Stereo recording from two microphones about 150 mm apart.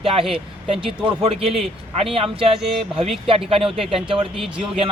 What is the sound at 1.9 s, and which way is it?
Speech, 40° right (ahead or behind).